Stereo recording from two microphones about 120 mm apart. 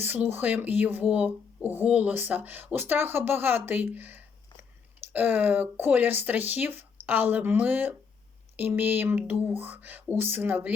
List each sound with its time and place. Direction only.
0.0 s speech: 15° right (ahead or behind)